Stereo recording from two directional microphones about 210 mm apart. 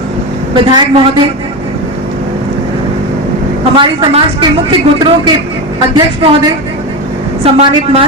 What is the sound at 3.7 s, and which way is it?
Speech, 20° right (ahead or behind).